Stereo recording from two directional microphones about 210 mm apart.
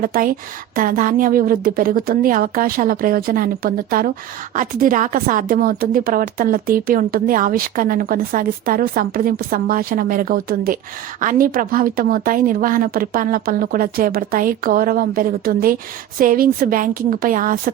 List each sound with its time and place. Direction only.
0.0 s a woman's voice: 40° right (ahead or behind)